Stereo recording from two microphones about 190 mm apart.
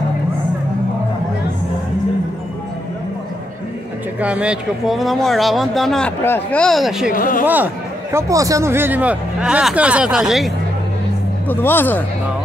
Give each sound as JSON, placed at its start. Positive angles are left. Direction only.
{"t": 4.2, "sound": "speech", "side_deg": -5}
{"t": 7.2, "sound": "speech", "side_deg": 45}
{"t": 7.4, "sound": "speech", "side_deg": -10}
{"t": 11.4, "sound": "speech", "side_deg": 10}